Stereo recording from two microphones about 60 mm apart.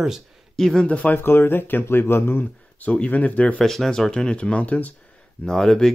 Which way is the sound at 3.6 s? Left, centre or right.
Centre.